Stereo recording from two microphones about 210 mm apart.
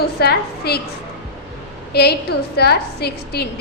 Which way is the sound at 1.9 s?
50° left (ahead or behind).